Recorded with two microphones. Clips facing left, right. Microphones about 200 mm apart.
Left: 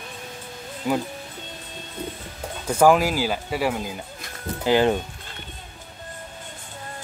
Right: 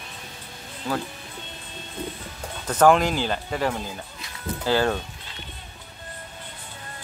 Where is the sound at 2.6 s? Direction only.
10° left (ahead or behind).